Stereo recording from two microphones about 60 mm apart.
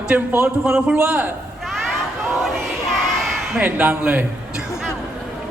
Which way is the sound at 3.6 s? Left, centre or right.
Right.